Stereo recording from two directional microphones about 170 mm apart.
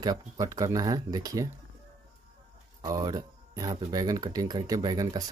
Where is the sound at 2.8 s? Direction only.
20° right (ahead or behind).